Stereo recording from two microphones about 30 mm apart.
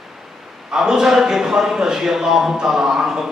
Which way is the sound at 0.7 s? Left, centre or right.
Centre.